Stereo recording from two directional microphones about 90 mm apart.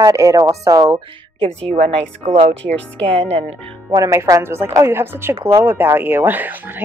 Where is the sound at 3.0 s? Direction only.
90° right.